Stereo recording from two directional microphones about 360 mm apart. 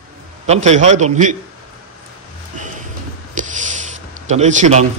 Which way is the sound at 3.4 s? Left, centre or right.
Right.